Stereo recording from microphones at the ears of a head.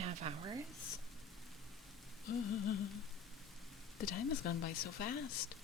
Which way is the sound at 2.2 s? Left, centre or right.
Left.